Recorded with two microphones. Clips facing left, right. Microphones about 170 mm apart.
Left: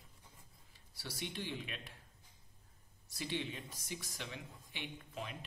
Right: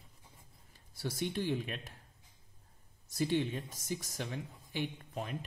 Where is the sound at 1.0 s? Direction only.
45° right (ahead or behind).